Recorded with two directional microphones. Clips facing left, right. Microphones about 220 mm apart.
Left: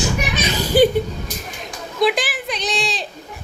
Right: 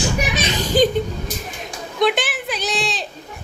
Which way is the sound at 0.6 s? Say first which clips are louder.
Left 3 dB; 10° left (ahead or behind).